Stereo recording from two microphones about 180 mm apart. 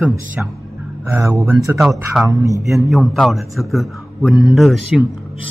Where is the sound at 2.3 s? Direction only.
15° right (ahead or behind).